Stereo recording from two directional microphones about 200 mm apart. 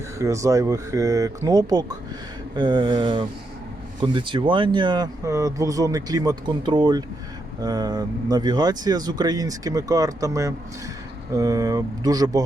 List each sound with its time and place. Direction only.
0.2 s speech: 15° right (ahead or behind)